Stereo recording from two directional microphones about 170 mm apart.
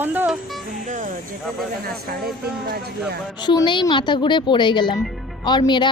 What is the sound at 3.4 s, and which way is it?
Speech, 25° left (ahead or behind).